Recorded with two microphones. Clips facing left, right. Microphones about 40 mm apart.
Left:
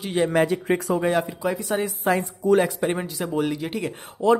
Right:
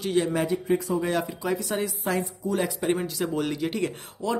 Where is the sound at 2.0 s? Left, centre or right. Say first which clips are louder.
Left 5 dB; left.